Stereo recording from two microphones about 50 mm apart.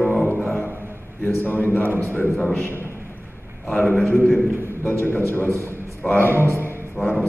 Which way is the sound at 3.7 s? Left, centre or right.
Left.